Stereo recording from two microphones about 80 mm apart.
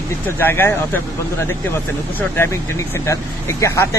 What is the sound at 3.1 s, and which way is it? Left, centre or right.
Speech, left.